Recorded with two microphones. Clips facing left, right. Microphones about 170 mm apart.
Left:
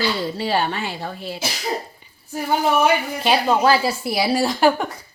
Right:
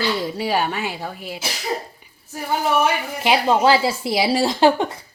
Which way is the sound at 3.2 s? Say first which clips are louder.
Right 1 dB; 15° right (ahead or behind).